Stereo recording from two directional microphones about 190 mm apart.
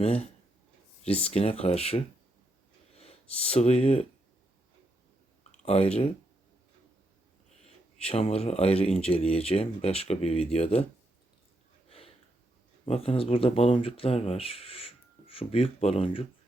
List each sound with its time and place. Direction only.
0.0 s speech: 30° left (ahead or behind)
5.4 s speech: 35° left (ahead or behind)
8.0 s speech: 30° left (ahead or behind)
11.9 s a sound: 30° left (ahead or behind)
12.8 s speech: 30° left (ahead or behind)